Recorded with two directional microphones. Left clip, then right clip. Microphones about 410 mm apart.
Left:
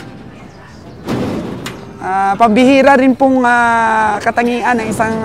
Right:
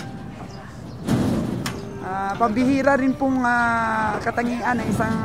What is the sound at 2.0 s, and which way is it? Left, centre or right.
Speech, left.